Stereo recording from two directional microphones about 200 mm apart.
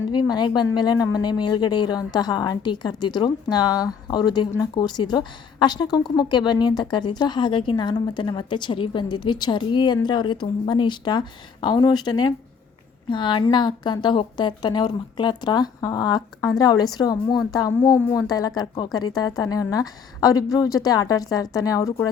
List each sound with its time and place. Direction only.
0.1 s a woman's voice: 20° left (ahead or behind)